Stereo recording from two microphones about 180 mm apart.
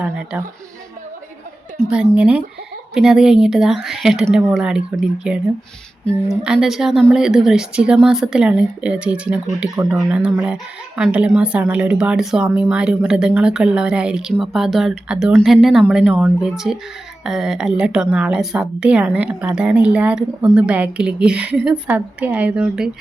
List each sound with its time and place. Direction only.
0.0 s speech: 5° right (ahead or behind)
1.8 s a woman's voice: 5° right (ahead or behind)
6.1 s a woman's voice: 5° right (ahead or behind)